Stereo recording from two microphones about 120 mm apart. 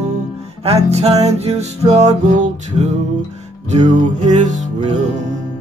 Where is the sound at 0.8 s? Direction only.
60° right (ahead or behind); by 5.0 s 85° right.